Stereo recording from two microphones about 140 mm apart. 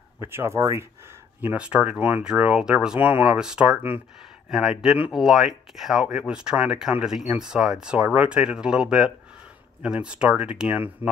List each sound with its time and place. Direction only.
0.2 s speech: 15° right (ahead or behind)